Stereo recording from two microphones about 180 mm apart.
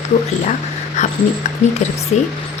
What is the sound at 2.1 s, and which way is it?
Speech, 40° left (ahead or behind).